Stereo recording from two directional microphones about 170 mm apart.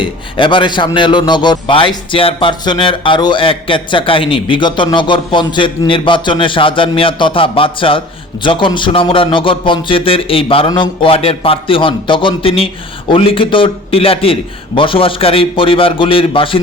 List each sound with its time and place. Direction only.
0.0 s a man's voice: 30° left (ahead or behind)